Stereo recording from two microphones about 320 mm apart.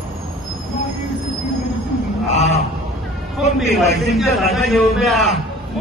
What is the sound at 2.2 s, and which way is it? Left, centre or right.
Speech, left.